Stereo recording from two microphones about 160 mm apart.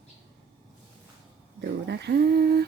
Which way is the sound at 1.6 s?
90° right.